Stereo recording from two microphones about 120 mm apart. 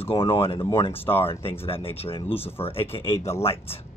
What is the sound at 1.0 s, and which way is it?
Speech, 20° left (ahead or behind).